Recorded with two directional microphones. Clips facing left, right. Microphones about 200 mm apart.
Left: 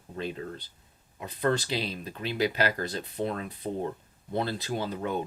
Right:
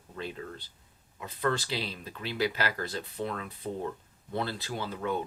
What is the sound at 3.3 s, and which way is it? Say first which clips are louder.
Speech: left 3 dB; 30° left (ahead or behind).